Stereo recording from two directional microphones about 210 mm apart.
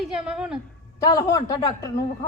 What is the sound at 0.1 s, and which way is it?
Speech, 5° right (ahead or behind).